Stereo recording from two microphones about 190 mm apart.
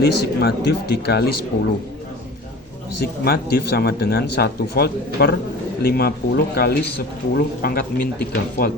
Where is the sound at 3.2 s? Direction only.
55° left (ahead or behind).